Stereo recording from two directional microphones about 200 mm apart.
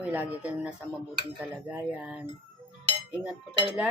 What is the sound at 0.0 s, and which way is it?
Speech, 10° right (ahead or behind).